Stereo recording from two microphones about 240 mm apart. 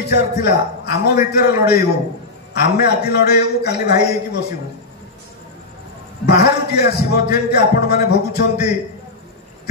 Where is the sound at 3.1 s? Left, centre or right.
Left.